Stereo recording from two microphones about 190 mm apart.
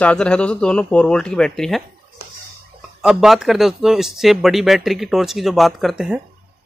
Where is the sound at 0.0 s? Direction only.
5° left (ahead or behind).